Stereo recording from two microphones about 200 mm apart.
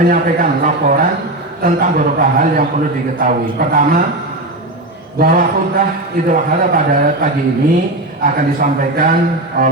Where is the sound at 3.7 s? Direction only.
45° right (ahead or behind).